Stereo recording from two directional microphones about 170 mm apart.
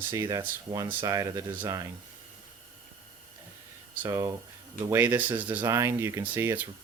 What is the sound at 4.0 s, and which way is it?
Speech, 15° right (ahead or behind).